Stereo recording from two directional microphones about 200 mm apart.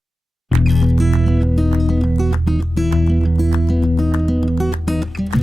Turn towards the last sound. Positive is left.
turn(degrees=0)  # may be behind; listen again after turning